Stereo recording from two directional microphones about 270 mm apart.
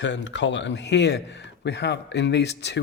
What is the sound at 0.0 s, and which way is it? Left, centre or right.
Speech, left.